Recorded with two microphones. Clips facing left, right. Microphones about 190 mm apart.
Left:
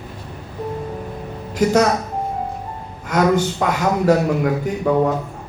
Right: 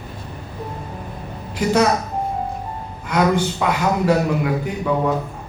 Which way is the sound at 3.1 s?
45° left (ahead or behind).